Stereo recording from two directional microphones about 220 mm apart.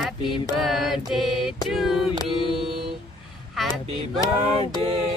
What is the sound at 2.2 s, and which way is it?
Mantra, 25° right (ahead or behind).